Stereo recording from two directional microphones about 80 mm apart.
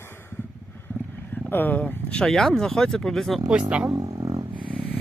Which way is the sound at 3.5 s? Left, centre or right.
Centre.